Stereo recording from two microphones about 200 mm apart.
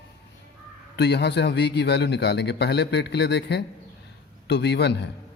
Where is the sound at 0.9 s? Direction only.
55° left (ahead or behind).